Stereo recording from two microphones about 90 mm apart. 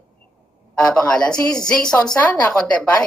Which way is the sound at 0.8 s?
10° left (ahead or behind).